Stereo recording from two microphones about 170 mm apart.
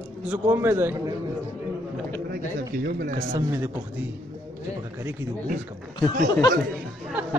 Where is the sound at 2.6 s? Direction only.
80° right; by 3.3 s 60° right (ahead or behind).